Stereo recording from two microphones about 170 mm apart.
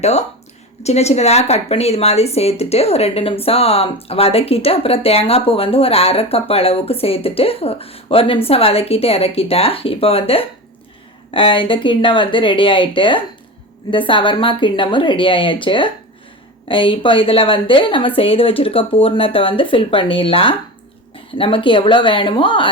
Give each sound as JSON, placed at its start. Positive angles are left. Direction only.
{"t": 0.0, "sound": "speech", "side_deg": 40}